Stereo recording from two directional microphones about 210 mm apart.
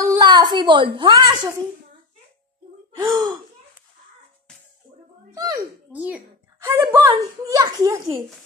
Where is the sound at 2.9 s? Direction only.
15° right (ahead or behind).